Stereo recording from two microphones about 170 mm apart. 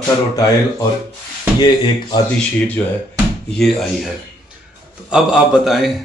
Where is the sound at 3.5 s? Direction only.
Centre (ahead or behind).